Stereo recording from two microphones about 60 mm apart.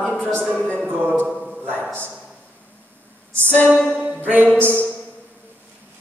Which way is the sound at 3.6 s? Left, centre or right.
Right.